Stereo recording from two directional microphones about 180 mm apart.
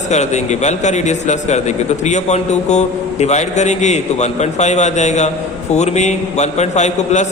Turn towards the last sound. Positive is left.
turn(degrees=40)  # may be behind; listen again after turning